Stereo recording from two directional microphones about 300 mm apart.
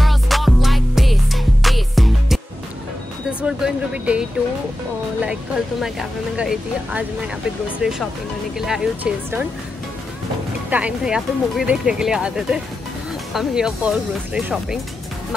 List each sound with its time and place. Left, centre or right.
0.0 s music: centre
3.4 s speech: centre
10.7 s speech: centre